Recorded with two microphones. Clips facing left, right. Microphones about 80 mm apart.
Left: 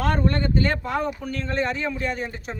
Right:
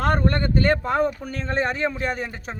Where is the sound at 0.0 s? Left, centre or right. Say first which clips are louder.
Right 1 dB; right.